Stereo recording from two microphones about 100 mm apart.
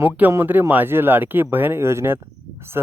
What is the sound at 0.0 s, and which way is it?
Speech, 20° right (ahead or behind).